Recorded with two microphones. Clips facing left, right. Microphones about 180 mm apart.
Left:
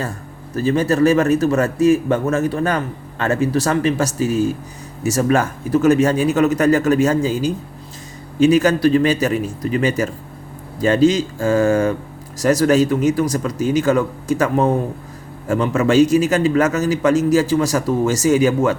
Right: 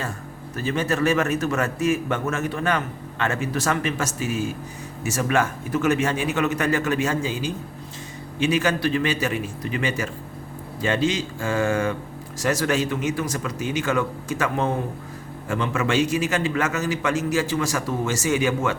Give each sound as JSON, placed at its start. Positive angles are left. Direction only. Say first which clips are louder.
{"t": 0.5, "sound": "a man's voice", "louder": "left 7 dB", "side_deg": 35}